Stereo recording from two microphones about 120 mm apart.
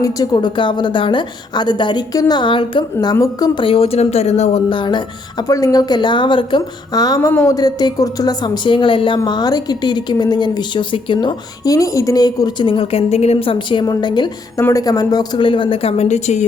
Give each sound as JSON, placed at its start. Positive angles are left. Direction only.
{"t": 0.0, "sound": "a woman's voice", "side_deg": 30}
{"t": 3.6, "sound": "speech", "side_deg": 50}
{"t": 4.7, "sound": "a woman's voice", "side_deg": 40}
{"t": 11.7, "sound": "a woman's voice", "side_deg": 30}
{"t": 14.6, "sound": "a woman's voice", "side_deg": 30}